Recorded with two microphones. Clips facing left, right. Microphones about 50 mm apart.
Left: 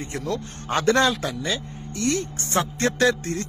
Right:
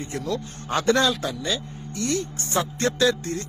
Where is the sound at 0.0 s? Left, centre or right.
Left.